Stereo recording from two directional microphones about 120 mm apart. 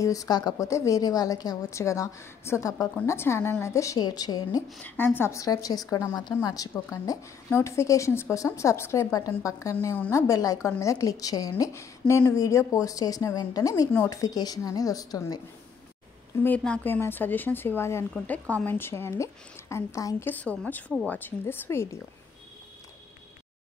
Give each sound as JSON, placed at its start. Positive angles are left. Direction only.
{"t": 0.0, "sound": "speech", "side_deg": 30}
{"t": 4.8, "sound": "a woman's voice", "side_deg": 15}
{"t": 16.4, "sound": "a woman's voice", "side_deg": 10}
{"t": 20.2, "sound": "a woman's voice", "side_deg": 10}